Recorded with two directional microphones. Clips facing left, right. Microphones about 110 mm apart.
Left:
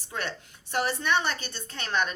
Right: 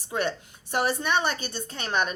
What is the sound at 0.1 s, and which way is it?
A woman's voice, 15° right (ahead or behind).